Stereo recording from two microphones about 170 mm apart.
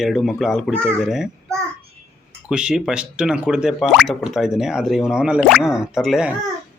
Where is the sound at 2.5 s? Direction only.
5° right (ahead or behind).